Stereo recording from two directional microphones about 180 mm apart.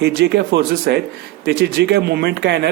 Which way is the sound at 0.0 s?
70° right (ahead or behind).